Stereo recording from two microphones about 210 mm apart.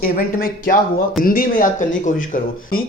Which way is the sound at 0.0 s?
45° left (ahead or behind).